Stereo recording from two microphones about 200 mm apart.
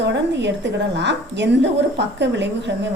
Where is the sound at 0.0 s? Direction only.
60° right (ahead or behind).